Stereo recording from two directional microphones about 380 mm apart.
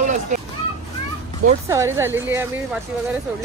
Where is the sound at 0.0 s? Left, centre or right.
Right.